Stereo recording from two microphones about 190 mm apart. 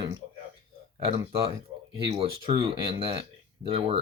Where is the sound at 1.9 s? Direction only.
30° right (ahead or behind).